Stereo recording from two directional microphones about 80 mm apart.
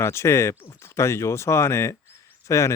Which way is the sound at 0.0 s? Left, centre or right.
Left.